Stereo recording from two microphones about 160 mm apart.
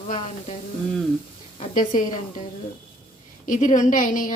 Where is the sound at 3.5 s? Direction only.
55° left (ahead or behind).